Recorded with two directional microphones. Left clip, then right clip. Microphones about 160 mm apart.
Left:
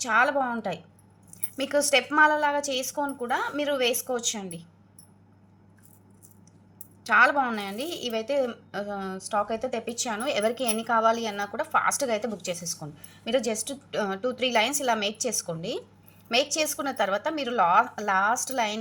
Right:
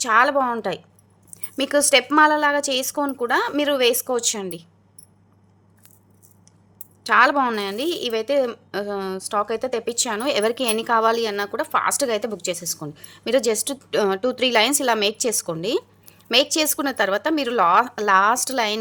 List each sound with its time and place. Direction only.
0.0 s a woman's voice: 60° right (ahead or behind)
7.0 s a woman's voice: 50° right (ahead or behind)